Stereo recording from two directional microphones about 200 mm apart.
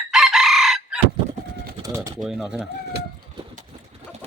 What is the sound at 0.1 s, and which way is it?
Chicken, centre (ahead or behind).